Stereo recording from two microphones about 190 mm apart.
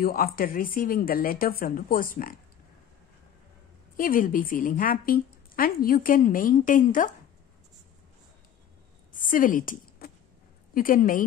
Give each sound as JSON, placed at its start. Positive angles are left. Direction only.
{"t": 0.0, "sound": "a woman's voice", "side_deg": 50}
{"t": 3.9, "sound": "a woman's voice", "side_deg": 45}
{"t": 9.2, "sound": "a sound", "side_deg": 45}
{"t": 10.7, "sound": "a woman's voice", "side_deg": 45}